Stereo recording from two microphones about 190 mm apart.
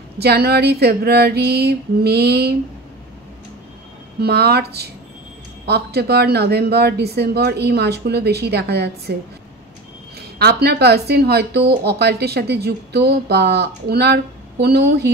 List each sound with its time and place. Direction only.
0.2 s speech: 55° right (ahead or behind)
4.2 s speech: 55° right (ahead or behind)
10.1 s speech: 55° right (ahead or behind)